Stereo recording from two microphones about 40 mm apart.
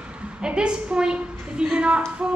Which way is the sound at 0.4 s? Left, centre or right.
Right.